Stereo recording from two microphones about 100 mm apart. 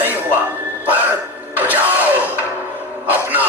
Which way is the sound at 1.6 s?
15° right (ahead or behind).